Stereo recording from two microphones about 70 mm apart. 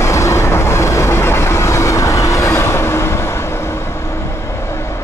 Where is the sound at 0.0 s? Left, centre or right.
Left.